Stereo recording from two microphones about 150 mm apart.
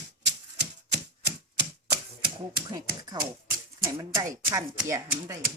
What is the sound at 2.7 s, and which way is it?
Chopping, 25° right (ahead or behind).